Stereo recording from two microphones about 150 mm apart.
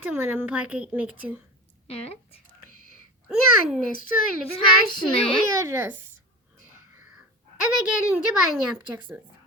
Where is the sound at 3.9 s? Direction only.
65° left (ahead or behind).